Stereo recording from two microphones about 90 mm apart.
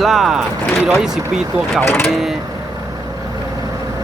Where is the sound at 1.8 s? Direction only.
25° left (ahead or behind).